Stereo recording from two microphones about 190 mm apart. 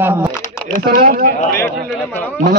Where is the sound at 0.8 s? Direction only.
60° right (ahead or behind).